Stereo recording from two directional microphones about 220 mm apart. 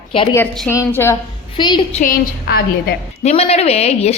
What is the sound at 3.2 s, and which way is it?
Speech, 30° left (ahead or behind).